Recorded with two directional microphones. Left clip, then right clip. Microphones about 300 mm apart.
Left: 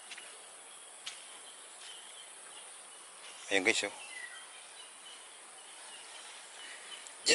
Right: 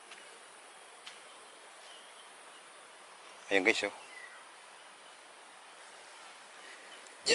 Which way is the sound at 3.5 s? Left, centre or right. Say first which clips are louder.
Right 1 dB; centre.